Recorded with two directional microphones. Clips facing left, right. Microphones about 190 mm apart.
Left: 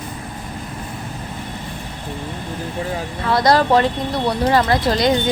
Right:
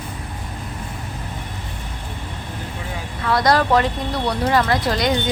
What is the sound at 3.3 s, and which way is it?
Speech, 30° left (ahead or behind).